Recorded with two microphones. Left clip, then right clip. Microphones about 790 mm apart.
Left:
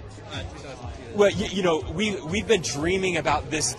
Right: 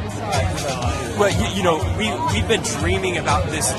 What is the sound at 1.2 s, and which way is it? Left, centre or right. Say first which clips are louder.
Speech: right 2 dB; left.